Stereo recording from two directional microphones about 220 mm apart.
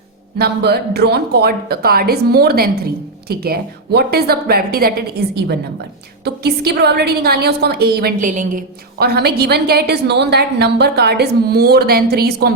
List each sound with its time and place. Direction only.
0.3 s a woman's voice: 45° right (ahead or behind)